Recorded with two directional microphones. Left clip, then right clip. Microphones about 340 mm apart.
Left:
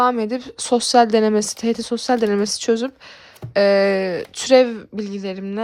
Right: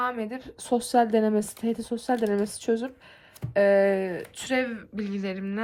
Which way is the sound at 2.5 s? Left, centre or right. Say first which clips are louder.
Left 8 dB; left.